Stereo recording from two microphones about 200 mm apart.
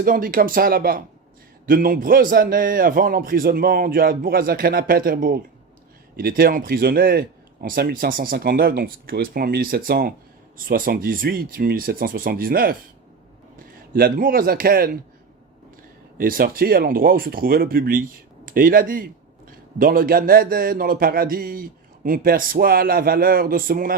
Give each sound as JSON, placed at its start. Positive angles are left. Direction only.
{"t": 0.0, "sound": "speech", "side_deg": -45}
{"t": 13.9, "sound": "speech", "side_deg": -45}
{"t": 16.1, "sound": "speech", "side_deg": -45}